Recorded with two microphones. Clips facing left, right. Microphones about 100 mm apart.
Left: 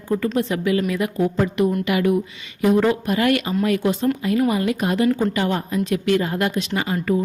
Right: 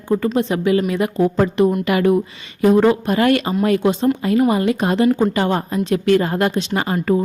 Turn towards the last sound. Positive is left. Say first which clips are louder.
# right 3 dB
turn(degrees=-45)  # may be behind; listen again after turning